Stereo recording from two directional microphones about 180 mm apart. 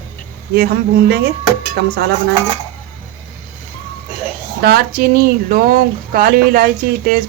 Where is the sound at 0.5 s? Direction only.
60° right (ahead or behind).